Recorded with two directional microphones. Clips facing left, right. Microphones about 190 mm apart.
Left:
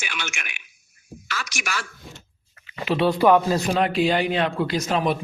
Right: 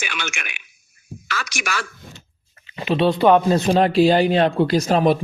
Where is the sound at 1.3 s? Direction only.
75° right (ahead or behind).